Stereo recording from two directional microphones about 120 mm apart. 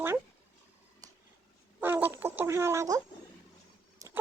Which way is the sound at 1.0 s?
30° right (ahead or behind).